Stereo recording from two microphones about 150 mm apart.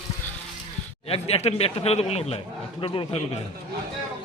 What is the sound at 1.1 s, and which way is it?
A man's voice, 40° left (ahead or behind).